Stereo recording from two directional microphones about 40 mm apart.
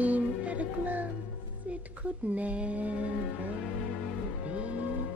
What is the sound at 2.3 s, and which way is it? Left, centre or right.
Mantra, right.